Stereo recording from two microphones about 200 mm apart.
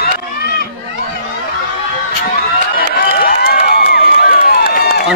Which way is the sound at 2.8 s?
45° left (ahead or behind).